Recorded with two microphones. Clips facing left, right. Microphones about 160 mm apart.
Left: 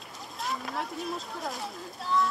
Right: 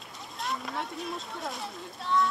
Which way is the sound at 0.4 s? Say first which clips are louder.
Even; centre (ahead or behind).